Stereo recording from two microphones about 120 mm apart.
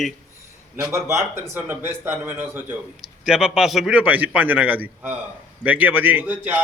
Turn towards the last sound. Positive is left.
turn(degrees=-15)  # may be behind; listen again after turning